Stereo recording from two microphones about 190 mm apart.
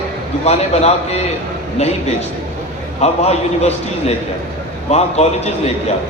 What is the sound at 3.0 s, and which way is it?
A man's voice, 35° left (ahead or behind).